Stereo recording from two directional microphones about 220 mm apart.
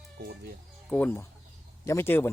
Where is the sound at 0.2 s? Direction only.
45° right (ahead or behind).